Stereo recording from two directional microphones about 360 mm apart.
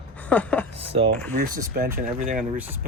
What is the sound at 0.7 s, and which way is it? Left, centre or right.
Speech, centre.